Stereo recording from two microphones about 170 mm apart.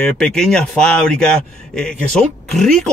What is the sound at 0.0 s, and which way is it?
Speech, 5° left (ahead or behind).